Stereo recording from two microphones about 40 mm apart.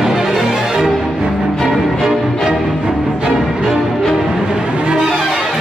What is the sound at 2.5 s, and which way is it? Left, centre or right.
Music, right.